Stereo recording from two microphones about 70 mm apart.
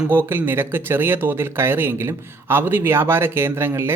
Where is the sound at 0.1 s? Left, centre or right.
Right.